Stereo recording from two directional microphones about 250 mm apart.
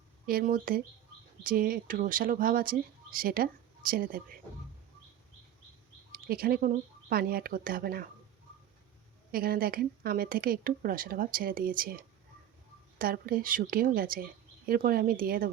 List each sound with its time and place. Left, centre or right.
0.3 s speech: right
6.1 s speech: right
9.3 s speech: right